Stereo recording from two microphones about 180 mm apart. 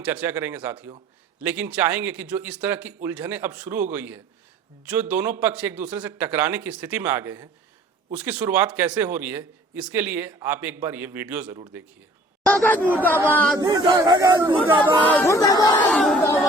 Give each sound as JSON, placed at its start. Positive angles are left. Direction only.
{"t": 0.0, "sound": "a man's voice", "side_deg": -10}
{"t": 12.5, "sound": "speech", "side_deg": 10}
{"t": 13.6, "sound": "speech", "side_deg": -20}
{"t": 15.0, "sound": "speech", "side_deg": 10}
{"t": 15.9, "sound": "crowd", "side_deg": 5}